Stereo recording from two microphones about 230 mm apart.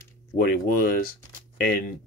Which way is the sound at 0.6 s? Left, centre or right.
Left.